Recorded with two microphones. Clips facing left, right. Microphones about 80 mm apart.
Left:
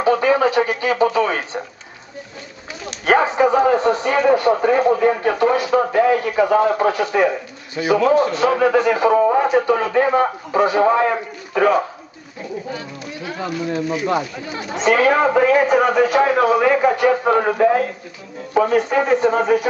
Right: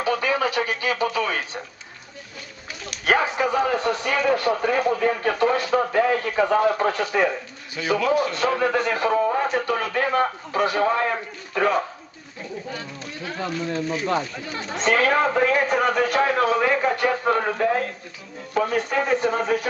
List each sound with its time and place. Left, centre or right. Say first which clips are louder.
0.0 s speech: left 7 dB; left
3.1 s a man's voice: left 6 dB; centre
6.6 s speech: left 4 dB; left
7.1 s speech: left 5 dB; centre
7.8 s speech: left 6 dB; centre
9.1 s speech: left 7 dB; centre
13.2 s a man's voice: left 3 dB; centre